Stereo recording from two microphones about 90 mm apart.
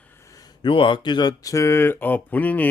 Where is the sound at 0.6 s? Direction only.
65° left (ahead or behind).